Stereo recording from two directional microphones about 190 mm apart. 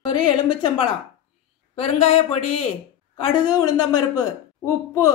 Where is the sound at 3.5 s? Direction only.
20° left (ahead or behind).